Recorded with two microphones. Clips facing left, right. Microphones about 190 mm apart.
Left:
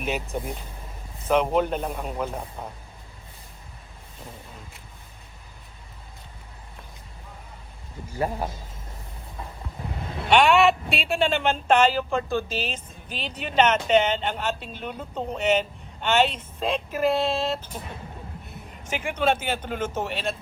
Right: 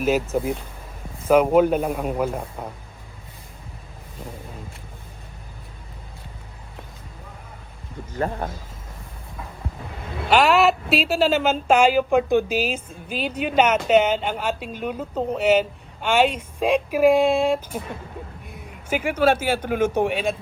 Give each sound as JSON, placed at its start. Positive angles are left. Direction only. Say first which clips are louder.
{"t": 0.0, "sound": "speech", "louder": "right 8 dB", "side_deg": -5}
{"t": 8.1, "sound": "speech", "louder": "right 1 dB", "side_deg": 10}
{"t": 10.2, "sound": "a man's voice", "louder": "right 1 dB", "side_deg": 0}